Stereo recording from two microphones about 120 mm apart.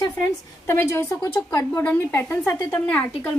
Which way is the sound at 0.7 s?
20° left (ahead or behind).